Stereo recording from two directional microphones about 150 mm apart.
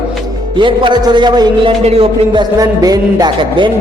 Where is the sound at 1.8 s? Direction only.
40° right (ahead or behind).